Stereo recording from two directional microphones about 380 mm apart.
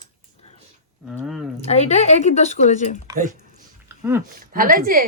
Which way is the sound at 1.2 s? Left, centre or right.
Centre.